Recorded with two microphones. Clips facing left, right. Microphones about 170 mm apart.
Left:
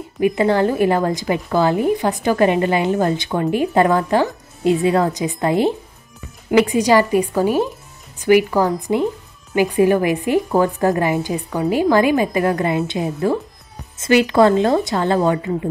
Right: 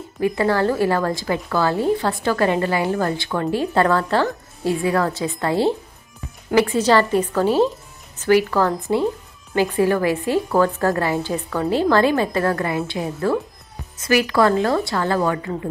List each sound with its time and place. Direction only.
0.2 s a woman's voice: 20° left (ahead or behind)